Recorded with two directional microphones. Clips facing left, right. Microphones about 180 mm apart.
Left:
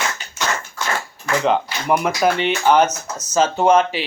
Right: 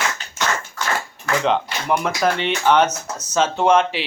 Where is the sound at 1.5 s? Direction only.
5° left (ahead or behind).